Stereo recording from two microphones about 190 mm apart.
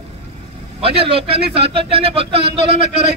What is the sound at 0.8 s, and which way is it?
A man's voice, 30° right (ahead or behind).